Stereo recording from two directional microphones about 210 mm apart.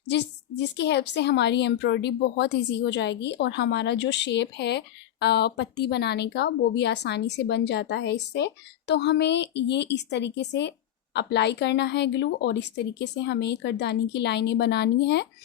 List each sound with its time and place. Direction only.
0.1 s a woman's voice: 55° left (ahead or behind)